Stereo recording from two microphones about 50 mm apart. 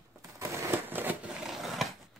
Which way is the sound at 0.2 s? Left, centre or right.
Right.